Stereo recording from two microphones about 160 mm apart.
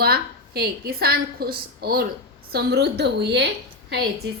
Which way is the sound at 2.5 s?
90° right.